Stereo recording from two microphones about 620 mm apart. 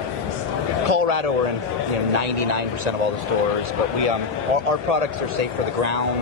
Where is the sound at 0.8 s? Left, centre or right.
Right.